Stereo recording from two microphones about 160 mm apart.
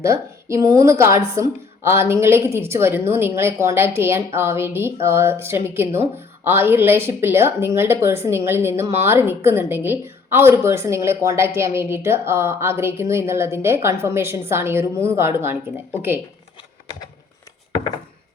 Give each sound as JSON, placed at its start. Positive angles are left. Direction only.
{"t": 0.0, "sound": "a woman's voice", "side_deg": -20}